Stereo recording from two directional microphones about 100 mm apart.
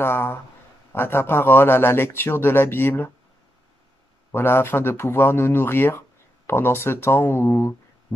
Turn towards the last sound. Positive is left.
turn(degrees=25)  # may be behind; listen again after turning